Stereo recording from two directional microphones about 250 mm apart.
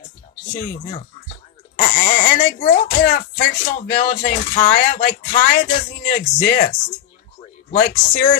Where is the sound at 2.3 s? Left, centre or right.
Left.